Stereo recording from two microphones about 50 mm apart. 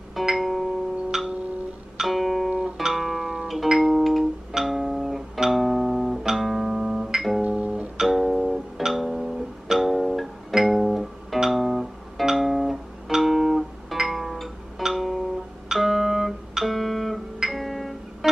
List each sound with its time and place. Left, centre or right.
0.2 s music: centre
1.1 s music: centre
2.5 s music: centre
2.9 s music: centre
7.4 s music: right
8.0 s music: centre
11.3 s guitar: centre
13.1 s music: centre
15.7 s guitar: centre
17.4 s music: centre